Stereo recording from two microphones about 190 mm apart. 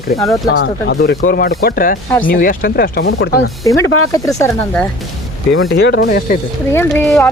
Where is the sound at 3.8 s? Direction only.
90° left.